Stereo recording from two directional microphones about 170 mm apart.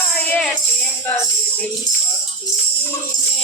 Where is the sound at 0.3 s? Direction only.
5° left (ahead or behind).